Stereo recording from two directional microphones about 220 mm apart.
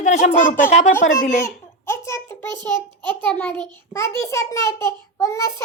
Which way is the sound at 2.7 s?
5° left (ahead or behind).